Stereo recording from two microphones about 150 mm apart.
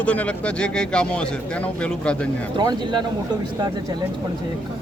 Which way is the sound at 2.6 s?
30° right (ahead or behind).